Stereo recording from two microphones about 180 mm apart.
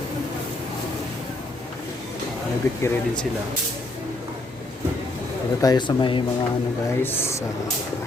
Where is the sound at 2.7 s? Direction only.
20° left (ahead or behind).